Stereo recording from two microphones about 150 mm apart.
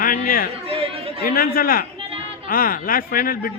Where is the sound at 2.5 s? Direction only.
70° left (ahead or behind).